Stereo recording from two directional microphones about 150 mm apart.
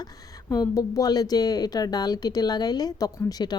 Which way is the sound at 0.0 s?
25° left (ahead or behind).